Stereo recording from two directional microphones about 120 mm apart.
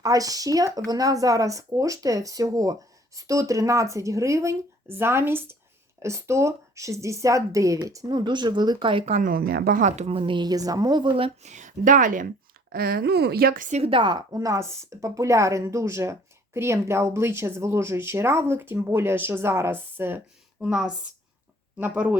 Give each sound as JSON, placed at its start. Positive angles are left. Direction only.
{"t": 0.0, "sound": "speech", "side_deg": -30}
{"t": 9.7, "sound": "speech", "side_deg": -80}
{"t": 10.2, "sound": "a woman's voice", "side_deg": -45}
{"t": 11.4, "sound": "a woman's voice", "side_deg": -90}
{"t": 13.7, "sound": "speech", "side_deg": -65}
{"t": 13.9, "sound": "speech", "side_deg": -40}
{"t": 20.6, "sound": "speech", "side_deg": -10}